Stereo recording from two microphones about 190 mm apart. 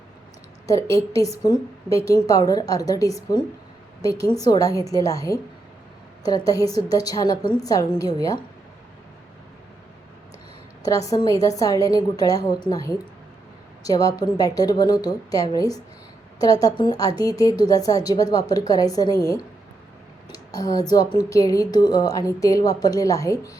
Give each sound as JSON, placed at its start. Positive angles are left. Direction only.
{"t": 0.7, "sound": "a woman's voice", "side_deg": 15}
{"t": 10.8, "sound": "speech", "side_deg": 15}
{"t": 20.3, "sound": "speech", "side_deg": 20}